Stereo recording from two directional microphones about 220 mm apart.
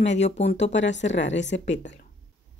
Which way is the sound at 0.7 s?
55° left (ahead or behind).